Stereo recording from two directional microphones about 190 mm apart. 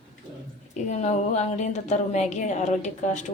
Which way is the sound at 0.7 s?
35° left (ahead or behind).